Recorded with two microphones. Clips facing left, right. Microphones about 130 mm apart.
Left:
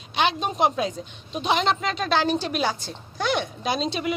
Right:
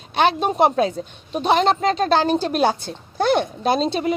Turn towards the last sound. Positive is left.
turn(degrees=-35)  # may be behind; listen again after turning